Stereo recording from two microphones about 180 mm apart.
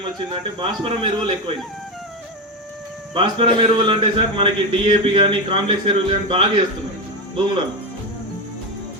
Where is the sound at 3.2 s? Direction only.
30° right (ahead or behind).